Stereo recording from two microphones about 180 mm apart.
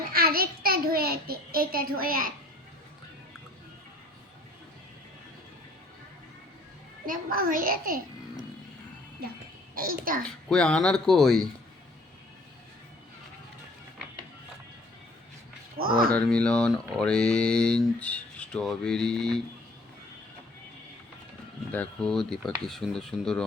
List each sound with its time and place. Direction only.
0.1 s a child's voice: 55° right (ahead or behind)
7.0 s a child's voice: 50° right (ahead or behind)
9.7 s a child's voice: 55° right (ahead or behind)
10.2 s speech: 5° left (ahead or behind)
15.8 s a child's voice: 55° right (ahead or behind)
16.1 s speech: 5° left (ahead or behind)
21.7 s speech: 5° left (ahead or behind)